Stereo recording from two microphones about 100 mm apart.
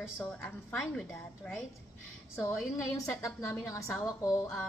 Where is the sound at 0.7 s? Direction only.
5° left (ahead or behind).